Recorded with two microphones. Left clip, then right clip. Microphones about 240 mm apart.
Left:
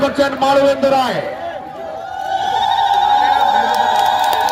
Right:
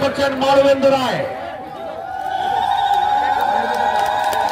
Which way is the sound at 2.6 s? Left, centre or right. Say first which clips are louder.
Left 3 dB; left.